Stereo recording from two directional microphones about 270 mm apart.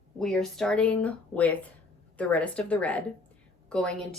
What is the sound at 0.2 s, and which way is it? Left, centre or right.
Speech, centre.